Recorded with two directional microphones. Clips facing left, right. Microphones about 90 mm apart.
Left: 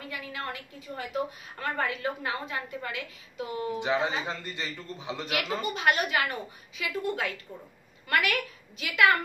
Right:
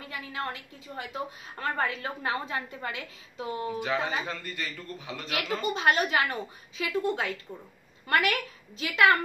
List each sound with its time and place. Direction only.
0.1 s a woman's voice: 30° right (ahead or behind)
3.6 s a man's voice: 25° left (ahead or behind)
5.8 s a woman's voice: 30° right (ahead or behind)